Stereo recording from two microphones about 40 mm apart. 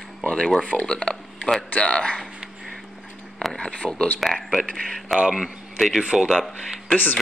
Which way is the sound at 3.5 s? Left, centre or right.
Left.